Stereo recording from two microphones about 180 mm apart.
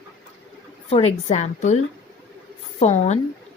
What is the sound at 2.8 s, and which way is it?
Speech, 40° left (ahead or behind).